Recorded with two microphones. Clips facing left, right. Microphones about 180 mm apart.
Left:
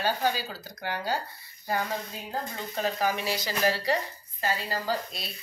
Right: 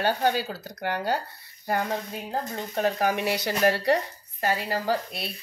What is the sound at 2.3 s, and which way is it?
Speech, 55° right (ahead or behind).